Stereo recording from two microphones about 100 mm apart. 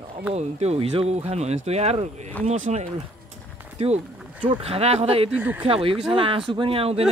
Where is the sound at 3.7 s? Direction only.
90° right.